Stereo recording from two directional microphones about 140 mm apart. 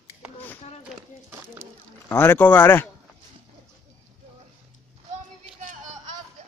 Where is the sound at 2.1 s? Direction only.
15° left (ahead or behind).